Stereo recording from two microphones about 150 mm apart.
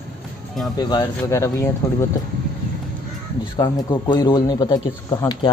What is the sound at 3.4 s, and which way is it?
Speech, 25° left (ahead or behind).